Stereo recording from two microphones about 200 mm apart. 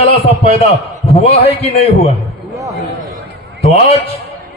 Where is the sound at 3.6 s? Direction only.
30° left (ahead or behind).